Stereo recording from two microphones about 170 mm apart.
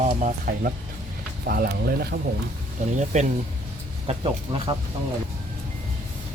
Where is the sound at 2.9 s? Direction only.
45° right (ahead or behind).